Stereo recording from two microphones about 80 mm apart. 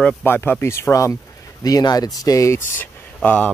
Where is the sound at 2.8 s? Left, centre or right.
Centre.